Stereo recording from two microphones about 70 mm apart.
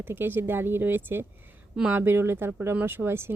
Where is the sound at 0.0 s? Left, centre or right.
Right.